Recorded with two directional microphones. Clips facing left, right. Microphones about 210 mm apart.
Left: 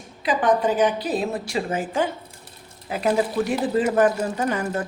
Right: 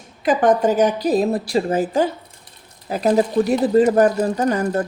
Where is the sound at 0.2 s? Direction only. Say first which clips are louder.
Right 4 dB; 45° right (ahead or behind).